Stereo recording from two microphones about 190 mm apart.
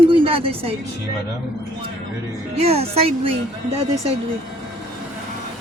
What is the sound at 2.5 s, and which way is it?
Speech, 30° right (ahead or behind).